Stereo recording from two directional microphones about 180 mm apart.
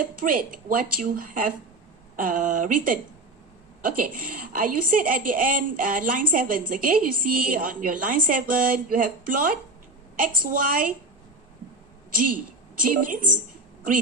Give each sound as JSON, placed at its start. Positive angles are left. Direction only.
{"t": 0.0, "sound": "a woman's voice", "side_deg": -50}
{"t": 12.8, "sound": "a woman's voice", "side_deg": -50}